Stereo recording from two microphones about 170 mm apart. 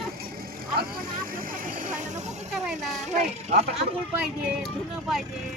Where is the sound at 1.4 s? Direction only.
55° right (ahead or behind).